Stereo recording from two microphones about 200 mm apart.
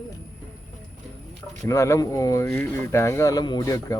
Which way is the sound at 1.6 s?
15° left (ahead or behind).